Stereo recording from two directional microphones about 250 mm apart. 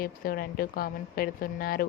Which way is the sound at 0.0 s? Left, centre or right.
Left.